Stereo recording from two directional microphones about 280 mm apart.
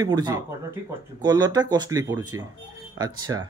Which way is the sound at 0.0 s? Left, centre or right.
Centre.